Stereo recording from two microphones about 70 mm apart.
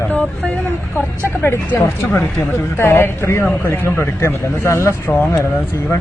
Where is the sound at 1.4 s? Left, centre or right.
Left.